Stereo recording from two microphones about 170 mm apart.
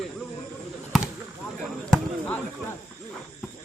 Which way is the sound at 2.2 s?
10° left (ahead or behind).